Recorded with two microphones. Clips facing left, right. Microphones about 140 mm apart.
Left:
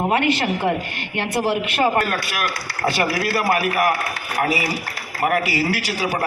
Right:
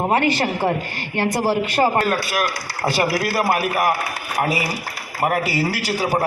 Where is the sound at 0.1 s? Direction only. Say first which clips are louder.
Right 1 dB; 35° right (ahead or behind).